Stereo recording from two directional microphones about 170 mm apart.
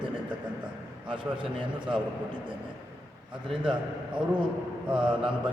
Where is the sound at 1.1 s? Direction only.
30° right (ahead or behind).